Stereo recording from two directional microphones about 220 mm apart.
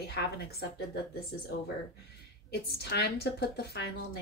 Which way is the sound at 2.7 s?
45° left (ahead or behind).